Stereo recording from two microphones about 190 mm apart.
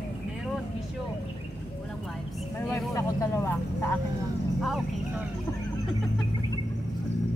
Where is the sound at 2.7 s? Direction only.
15° left (ahead or behind).